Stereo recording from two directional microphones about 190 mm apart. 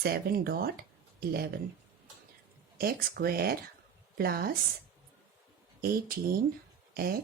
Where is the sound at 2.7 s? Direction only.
50° right (ahead or behind).